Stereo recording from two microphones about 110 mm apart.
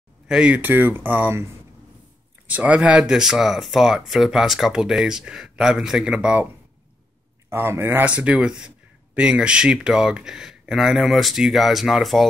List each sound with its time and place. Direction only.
0.3 s speech: 5° right (ahead or behind)
0.6 s speech: 15° right (ahead or behind)
7.4 s speech: 20° right (ahead or behind)
8.0 s speech: 10° right (ahead or behind)